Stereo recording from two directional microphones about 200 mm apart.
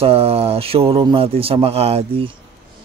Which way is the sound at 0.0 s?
30° right (ahead or behind).